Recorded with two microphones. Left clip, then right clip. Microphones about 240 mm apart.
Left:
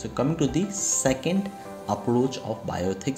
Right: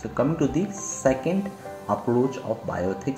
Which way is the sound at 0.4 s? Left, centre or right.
Left.